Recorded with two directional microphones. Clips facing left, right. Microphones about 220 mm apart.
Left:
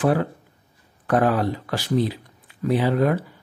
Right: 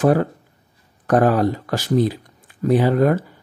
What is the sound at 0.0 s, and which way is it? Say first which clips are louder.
Speech: right 4 dB; 45° right (ahead or behind).